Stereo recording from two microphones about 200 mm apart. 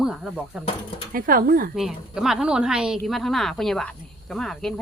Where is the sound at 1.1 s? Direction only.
45° right (ahead or behind).